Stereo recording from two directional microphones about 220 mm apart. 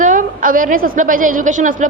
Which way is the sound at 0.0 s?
35° right (ahead or behind).